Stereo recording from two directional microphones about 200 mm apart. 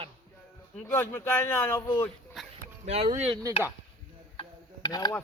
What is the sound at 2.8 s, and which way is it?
Speech, 30° right (ahead or behind).